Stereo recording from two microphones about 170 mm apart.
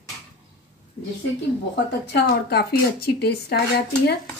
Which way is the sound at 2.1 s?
70° left (ahead or behind).